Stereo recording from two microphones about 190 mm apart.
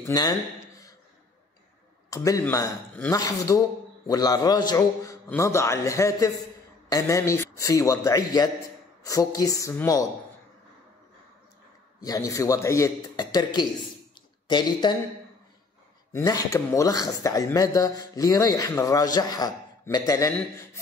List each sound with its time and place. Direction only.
0.0 s a sound: 20° left (ahead or behind)
2.0 s speech: 15° left (ahead or behind)
12.0 s a man's voice: 20° left (ahead or behind)
16.1 s speech: 15° left (ahead or behind)